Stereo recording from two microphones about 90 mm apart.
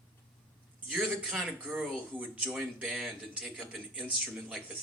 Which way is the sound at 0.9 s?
5° right (ahead or behind).